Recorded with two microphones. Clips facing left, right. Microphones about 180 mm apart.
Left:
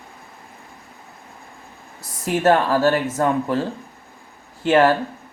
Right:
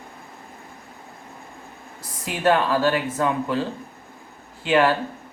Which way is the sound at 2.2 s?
45° left (ahead or behind).